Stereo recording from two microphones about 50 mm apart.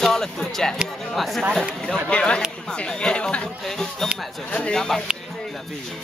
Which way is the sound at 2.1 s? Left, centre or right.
Left.